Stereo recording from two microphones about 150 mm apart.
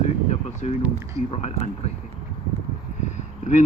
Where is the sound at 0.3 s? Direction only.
45° left (ahead or behind).